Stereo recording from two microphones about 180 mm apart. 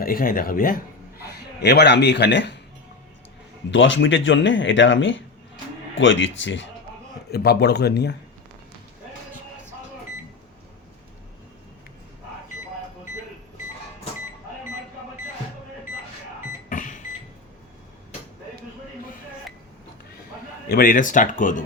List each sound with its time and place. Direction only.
0.0 s a man's voice: 55° left (ahead or behind); by 2.6 s 75° left (ahead or behind)
3.7 s speech: 90° left
7.3 s speech: 60° left (ahead or behind)
16.6 s microwave oven: 45° left (ahead or behind)
20.7 s speech: 55° left (ahead or behind)